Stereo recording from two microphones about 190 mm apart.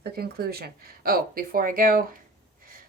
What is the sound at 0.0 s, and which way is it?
A woman's voice, 55° right (ahead or behind).